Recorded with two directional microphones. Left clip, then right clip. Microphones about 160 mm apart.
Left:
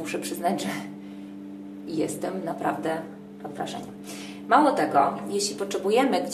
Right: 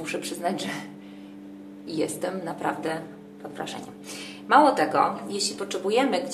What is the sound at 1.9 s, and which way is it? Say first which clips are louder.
A woman's voice: right 1 dB; 20° right (ahead or behind).